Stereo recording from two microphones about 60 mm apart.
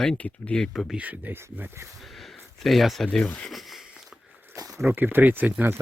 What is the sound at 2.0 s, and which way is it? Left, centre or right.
Speech, centre.